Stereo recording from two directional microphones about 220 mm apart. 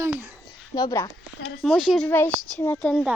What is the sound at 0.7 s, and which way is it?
Speech, 15° left (ahead or behind).